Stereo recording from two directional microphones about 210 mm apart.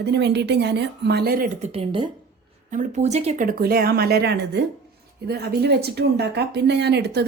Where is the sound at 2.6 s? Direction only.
35° right (ahead or behind).